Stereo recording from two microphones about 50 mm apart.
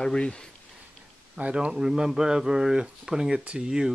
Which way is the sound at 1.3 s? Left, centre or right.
Right.